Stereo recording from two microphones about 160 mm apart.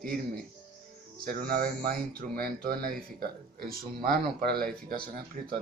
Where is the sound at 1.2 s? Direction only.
65° right (ahead or behind).